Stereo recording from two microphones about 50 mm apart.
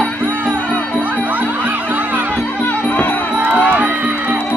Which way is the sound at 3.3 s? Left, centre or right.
Right.